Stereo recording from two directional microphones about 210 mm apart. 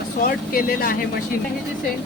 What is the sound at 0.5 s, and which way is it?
Speech, 45° left (ahead or behind).